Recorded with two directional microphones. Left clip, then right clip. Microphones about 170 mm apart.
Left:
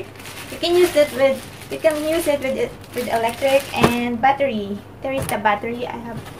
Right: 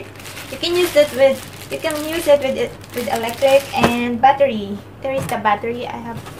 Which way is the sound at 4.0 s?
10° right (ahead or behind).